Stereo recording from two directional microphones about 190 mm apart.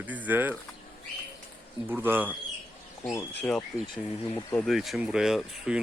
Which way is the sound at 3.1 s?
15° left (ahead or behind).